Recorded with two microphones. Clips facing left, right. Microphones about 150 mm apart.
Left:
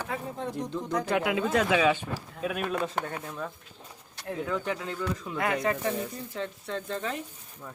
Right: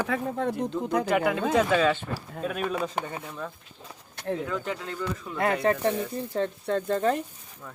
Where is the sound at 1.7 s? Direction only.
10° left (ahead or behind).